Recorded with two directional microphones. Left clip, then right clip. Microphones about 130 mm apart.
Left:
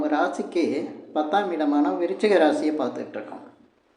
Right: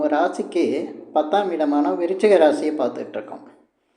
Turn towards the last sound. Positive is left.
turn(degrees=-20)  # may be behind; listen again after turning